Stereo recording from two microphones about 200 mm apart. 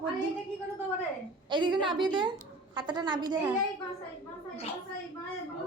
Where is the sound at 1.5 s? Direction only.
25° right (ahead or behind).